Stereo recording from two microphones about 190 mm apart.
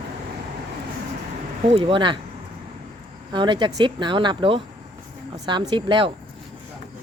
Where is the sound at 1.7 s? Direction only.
25° right (ahead or behind).